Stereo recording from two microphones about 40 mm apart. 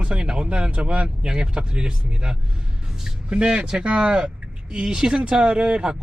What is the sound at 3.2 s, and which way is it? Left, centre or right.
Speech, right.